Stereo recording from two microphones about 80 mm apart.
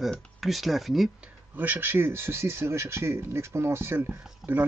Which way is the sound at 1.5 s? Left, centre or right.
Right.